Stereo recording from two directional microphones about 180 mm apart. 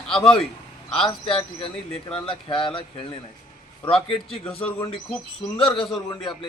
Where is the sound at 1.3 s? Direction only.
30° left (ahead or behind).